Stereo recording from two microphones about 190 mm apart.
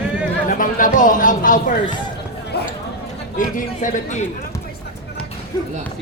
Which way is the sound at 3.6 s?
40° left (ahead or behind).